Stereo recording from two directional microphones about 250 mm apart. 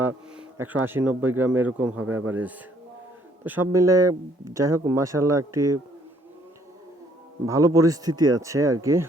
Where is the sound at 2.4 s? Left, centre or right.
Centre.